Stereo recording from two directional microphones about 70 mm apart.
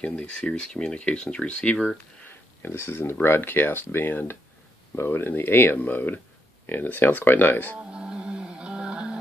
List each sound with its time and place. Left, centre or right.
0.0 s speech: centre
2.2 s speech: left
7.7 s music: centre